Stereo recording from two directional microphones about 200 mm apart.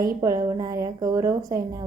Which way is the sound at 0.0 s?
20° right (ahead or behind).